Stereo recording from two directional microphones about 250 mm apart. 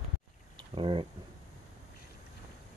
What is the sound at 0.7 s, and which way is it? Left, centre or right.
Speech, right.